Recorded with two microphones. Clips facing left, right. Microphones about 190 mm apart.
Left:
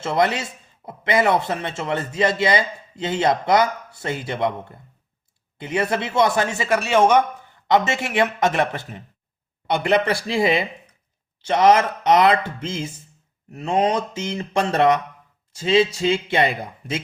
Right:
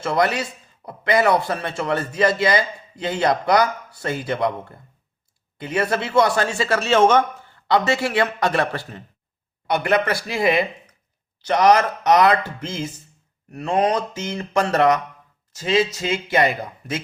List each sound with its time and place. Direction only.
0.0 s a man's voice: 25° left (ahead or behind)